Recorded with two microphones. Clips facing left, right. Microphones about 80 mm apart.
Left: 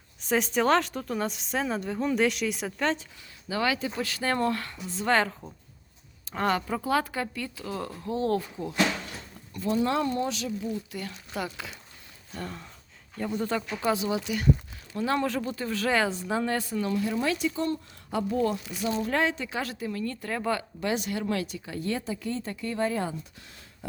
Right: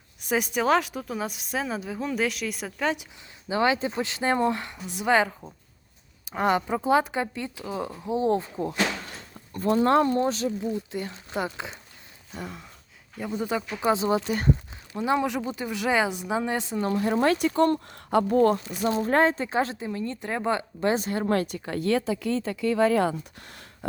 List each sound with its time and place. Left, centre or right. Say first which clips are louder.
0.3 s speech: even; centre
3.5 s speech: right 4 dB; right
9.5 s speech: right 5 dB; right
12.3 s speech: even; centre
13.9 s speech: right 7 dB; right
14.9 s speech: right 2 dB; centre
16.8 s speech: right 7 dB; right
21.8 s speech: right 7 dB; right